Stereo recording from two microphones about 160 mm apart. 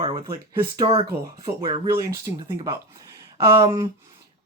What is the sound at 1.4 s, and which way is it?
Speech, 25° right (ahead or behind).